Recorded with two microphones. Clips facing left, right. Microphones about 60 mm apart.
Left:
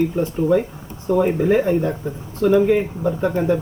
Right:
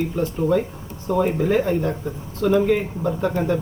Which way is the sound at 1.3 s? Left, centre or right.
Centre.